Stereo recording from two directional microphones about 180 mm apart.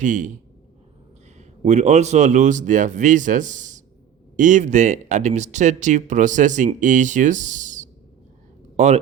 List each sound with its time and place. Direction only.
0.0 s speech: 45° right (ahead or behind)
1.4 s speech: 40° right (ahead or behind)
8.7 s a sound: 40° right (ahead or behind)